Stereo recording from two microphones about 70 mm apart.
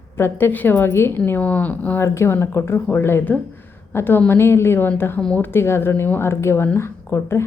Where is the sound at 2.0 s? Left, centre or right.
Left.